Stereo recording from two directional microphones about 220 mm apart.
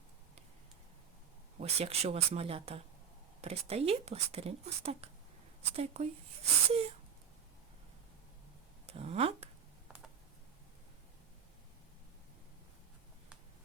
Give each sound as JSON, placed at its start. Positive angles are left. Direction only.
{"t": 1.5, "sound": "speech", "side_deg": -30}
{"t": 8.9, "sound": "speech", "side_deg": -25}